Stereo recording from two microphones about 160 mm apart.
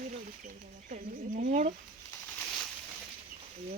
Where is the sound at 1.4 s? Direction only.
50° right (ahead or behind).